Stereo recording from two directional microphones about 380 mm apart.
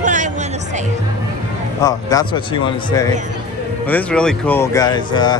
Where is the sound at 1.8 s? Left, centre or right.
Centre.